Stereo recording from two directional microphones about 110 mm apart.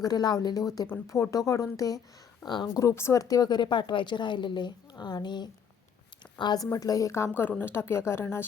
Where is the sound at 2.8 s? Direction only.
25° left (ahead or behind).